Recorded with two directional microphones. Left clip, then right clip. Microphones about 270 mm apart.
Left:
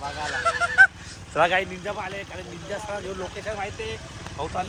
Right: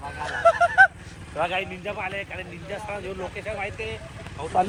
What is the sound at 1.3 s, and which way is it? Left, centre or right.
Speech, left.